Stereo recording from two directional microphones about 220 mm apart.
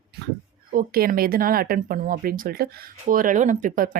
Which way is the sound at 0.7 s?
40° right (ahead or behind).